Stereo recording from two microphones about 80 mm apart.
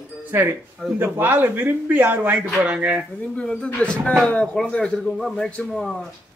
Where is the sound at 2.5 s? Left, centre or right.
Centre.